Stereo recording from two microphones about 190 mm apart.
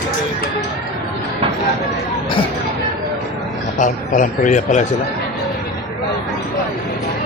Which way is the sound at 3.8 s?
45° left (ahead or behind).